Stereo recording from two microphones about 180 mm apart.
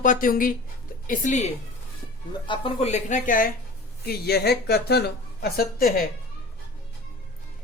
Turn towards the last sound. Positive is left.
turn(degrees=55)  # may be behind; listen again after turning